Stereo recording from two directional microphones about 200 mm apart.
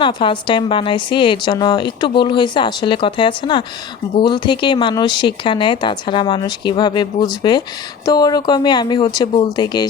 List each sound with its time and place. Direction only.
0.0 s a woman's voice: 25° left (ahead or behind)